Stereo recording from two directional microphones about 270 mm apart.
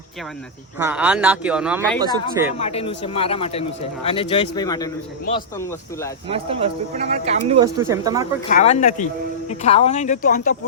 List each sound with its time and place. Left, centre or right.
0.8 s speech: centre
2.6 s a man's voice: left
6.2 s speech: centre
8.4 s a man's voice: left